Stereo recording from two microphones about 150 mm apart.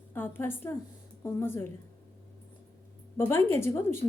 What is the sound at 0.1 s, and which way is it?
A woman's voice, 15° left (ahead or behind).